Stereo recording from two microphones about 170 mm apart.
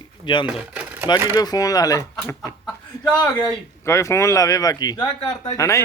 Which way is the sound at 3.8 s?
15° left (ahead or behind).